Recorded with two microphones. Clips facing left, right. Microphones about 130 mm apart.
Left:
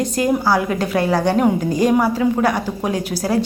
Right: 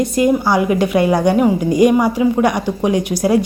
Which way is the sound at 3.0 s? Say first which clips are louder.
Right 4 dB; 35° left (ahead or behind).